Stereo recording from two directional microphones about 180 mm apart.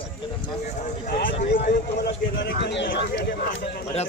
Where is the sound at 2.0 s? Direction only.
70° left (ahead or behind).